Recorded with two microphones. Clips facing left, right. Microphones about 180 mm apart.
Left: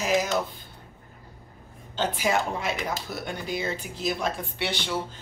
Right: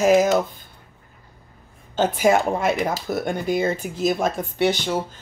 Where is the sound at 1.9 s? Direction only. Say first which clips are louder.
Right 8 dB; 50° right (ahead or behind).